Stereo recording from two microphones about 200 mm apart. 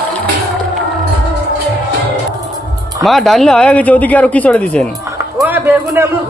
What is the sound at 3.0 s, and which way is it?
A woman's voice, centre (ahead or behind).